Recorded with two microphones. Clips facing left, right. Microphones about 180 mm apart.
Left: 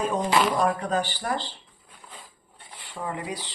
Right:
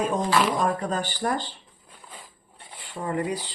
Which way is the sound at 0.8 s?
40° right (ahead or behind).